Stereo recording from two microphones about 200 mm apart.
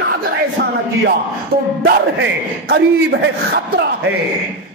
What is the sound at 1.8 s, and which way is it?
A man's voice, 50° right (ahead or behind).